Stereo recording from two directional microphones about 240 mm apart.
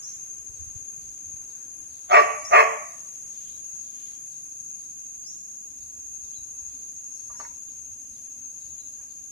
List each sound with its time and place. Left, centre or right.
2.0 s dog: right